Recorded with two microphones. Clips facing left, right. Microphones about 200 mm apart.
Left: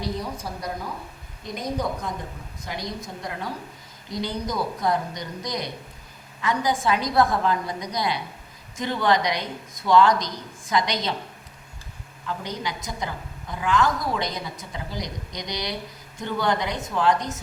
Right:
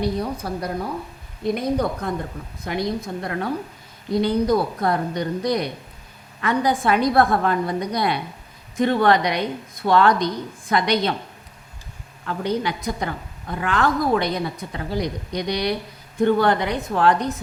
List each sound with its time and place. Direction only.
0.0 s a woman's voice: 60° right (ahead or behind)
12.2 s a woman's voice: 60° right (ahead or behind)